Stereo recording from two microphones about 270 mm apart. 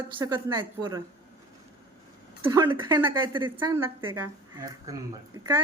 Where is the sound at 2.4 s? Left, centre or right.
Centre.